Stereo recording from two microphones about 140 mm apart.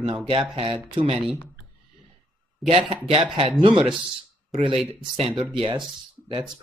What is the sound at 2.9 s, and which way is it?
Speech, 40° right (ahead or behind).